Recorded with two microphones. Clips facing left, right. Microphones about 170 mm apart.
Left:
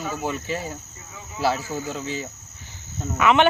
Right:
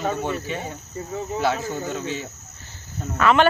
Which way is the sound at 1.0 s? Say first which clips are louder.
Right 12 dB; 40° right (ahead or behind).